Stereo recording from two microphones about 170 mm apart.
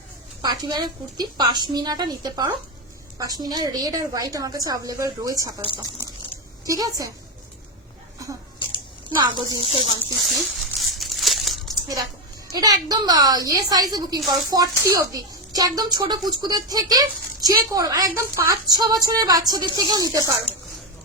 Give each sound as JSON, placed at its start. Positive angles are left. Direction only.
{"t": 0.4, "sound": "speech", "side_deg": -25}
{"t": 6.7, "sound": "speech", "side_deg": -20}
{"t": 9.3, "sound": "speech", "side_deg": -30}
{"t": 10.2, "sound": "crumpling", "side_deg": 0}
{"t": 12.5, "sound": "speech", "side_deg": -25}
{"t": 14.2, "sound": "speech", "side_deg": 0}
{"t": 14.5, "sound": "speech", "side_deg": -20}